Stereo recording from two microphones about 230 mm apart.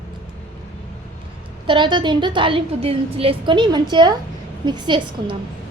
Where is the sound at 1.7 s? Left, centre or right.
Centre.